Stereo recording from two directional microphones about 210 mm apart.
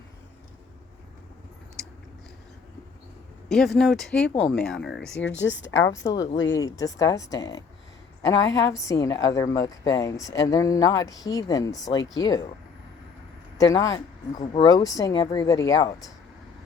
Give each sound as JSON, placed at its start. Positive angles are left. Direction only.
{"t": 3.5, "sound": "speech", "side_deg": 0}
{"t": 5.2, "sound": "a woman's voice", "side_deg": 60}
{"t": 6.6, "sound": "a woman's voice", "side_deg": 15}
{"t": 13.6, "sound": "a woman's voice", "side_deg": 15}